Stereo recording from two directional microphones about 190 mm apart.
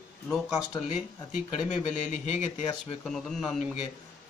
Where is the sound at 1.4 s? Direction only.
35° left (ahead or behind).